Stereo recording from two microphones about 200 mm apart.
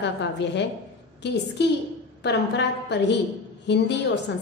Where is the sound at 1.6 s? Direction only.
55° left (ahead or behind).